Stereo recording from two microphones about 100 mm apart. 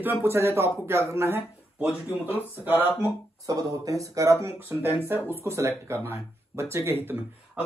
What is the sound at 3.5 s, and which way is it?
A man's voice, 35° right (ahead or behind).